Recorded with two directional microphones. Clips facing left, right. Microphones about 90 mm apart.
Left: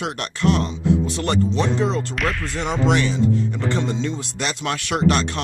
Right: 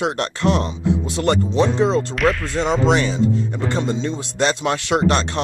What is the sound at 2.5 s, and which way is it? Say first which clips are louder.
Speech: even; 20° right (ahead or behind).